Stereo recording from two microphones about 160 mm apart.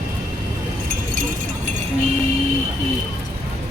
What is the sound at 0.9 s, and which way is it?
Keys jangling, 60° right (ahead or behind).